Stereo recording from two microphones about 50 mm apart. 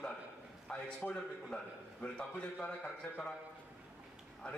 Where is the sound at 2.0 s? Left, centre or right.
Left.